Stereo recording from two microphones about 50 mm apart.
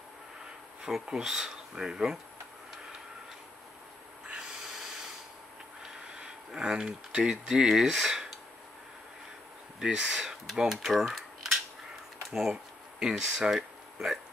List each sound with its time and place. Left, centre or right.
0.8 s speech: centre
4.3 s snort: centre
5.8 s a sound: centre
7.2 s speech: centre
9.8 s speech: centre